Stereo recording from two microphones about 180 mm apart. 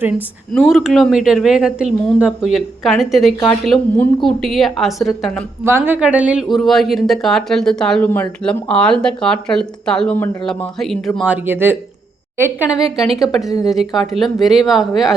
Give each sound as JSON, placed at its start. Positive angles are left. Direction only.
{"t": 0.5, "sound": "speech", "side_deg": 0}
{"t": 5.6, "sound": "speech", "side_deg": -10}
{"t": 11.3, "sound": "speech", "side_deg": -10}